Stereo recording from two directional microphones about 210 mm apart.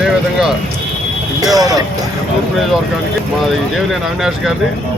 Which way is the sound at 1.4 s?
15° right (ahead or behind).